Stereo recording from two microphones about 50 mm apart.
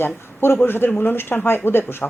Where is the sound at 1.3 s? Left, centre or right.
Left.